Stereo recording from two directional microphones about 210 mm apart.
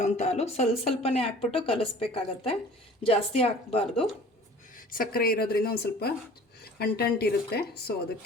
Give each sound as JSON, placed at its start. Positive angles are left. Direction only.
{"t": 0.0, "sound": "a woman's voice", "side_deg": 35}
{"t": 4.9, "sound": "a woman's voice", "side_deg": 45}